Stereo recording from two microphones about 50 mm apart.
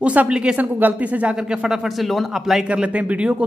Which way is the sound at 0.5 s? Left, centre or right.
Right.